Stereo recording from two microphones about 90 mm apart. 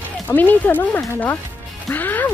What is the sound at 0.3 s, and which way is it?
Speech, 20° left (ahead or behind).